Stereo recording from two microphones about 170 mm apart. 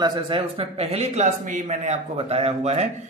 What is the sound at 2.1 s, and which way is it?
Speech, 35° right (ahead or behind).